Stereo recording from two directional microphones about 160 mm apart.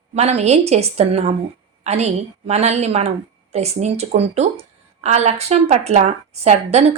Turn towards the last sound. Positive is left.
turn(degrees=-40)  # may be behind; listen again after turning